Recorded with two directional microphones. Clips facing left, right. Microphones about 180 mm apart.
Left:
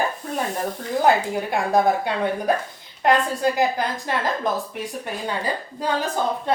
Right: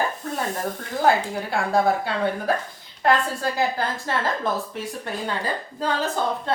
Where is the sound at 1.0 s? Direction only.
20° left (ahead or behind).